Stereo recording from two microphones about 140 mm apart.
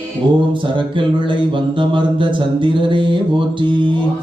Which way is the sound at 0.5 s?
35° right (ahead or behind).